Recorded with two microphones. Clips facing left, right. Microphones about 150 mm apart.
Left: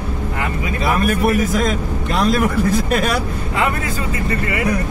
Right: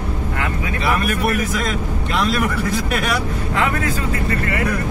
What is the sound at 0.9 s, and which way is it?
A man's voice, 40° left (ahead or behind).